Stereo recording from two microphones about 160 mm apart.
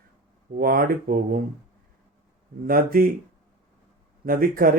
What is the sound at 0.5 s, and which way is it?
Speech, 65° right (ahead or behind).